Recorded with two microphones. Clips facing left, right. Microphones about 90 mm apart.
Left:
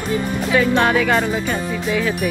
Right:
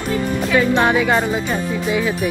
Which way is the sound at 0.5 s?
20° right (ahead or behind).